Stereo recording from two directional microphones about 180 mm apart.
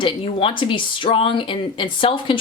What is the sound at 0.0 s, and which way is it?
Speech, 30° left (ahead or behind).